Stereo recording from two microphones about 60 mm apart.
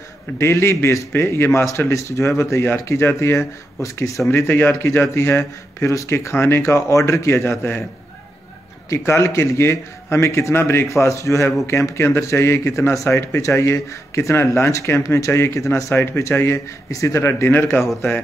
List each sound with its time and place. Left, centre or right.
0.4 s speech: left
4.3 s a man's voice: left
5.9 s speech: left
7.2 s a man's voice: left
8.9 s speech: left
10.9 s speech: left
11.6 s speech: left
15.0 s speech: left
16.9 s speech: left